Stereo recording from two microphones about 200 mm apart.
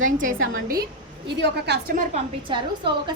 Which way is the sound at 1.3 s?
60° right (ahead or behind).